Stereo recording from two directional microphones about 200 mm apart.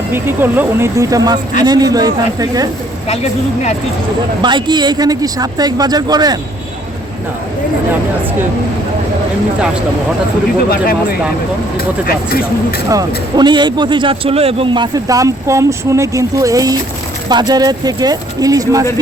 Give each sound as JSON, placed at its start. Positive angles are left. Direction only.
{"t": 0.1, "sound": "speech", "side_deg": -10}
{"t": 4.4, "sound": "speech", "side_deg": -20}
{"t": 11.8, "sound": "speech", "side_deg": 50}
{"t": 12.9, "sound": "speech", "side_deg": -20}